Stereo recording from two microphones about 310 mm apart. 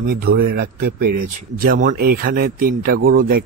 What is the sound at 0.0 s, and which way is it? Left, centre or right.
Speech, right.